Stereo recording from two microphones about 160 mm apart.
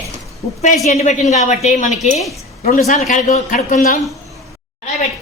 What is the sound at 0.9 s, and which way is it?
A woman's voice, 45° left (ahead or behind).